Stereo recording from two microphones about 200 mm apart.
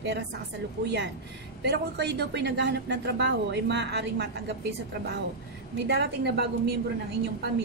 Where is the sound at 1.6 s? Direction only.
55° right (ahead or behind).